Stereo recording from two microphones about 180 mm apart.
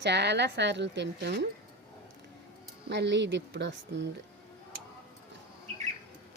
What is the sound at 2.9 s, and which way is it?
Speech, 75° right (ahead or behind).